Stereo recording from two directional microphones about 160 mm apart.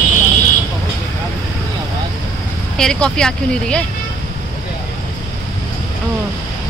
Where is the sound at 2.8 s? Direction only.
5° left (ahead or behind).